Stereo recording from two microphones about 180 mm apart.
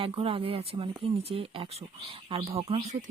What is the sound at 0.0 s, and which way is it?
Speech, 30° right (ahead or behind).